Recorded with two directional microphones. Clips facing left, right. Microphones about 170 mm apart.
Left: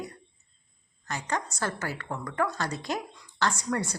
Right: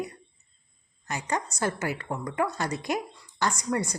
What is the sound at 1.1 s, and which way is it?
A woman's voice, 15° right (ahead or behind).